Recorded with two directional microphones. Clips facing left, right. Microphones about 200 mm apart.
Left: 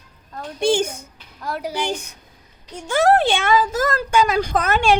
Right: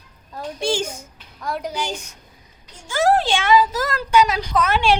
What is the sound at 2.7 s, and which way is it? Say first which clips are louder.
Speech: left 2 dB; 60° left (ahead or behind).